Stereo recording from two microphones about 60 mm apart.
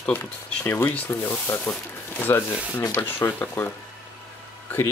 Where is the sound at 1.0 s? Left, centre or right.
Left.